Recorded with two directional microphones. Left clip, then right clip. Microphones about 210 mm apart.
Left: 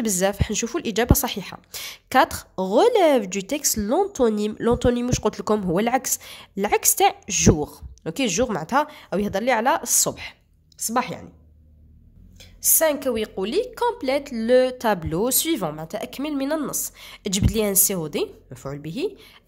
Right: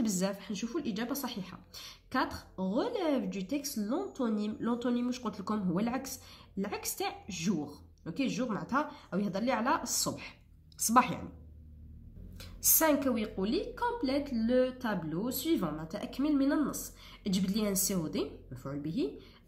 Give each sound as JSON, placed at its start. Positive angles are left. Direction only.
{"t": 0.0, "sound": "a woman's voice", "side_deg": 40}
{"t": 10.8, "sound": "a woman's voice", "side_deg": 20}
{"t": 12.7, "sound": "a woman's voice", "side_deg": 30}